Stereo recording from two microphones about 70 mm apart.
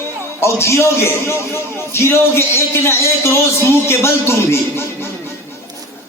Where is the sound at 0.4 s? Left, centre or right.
Left.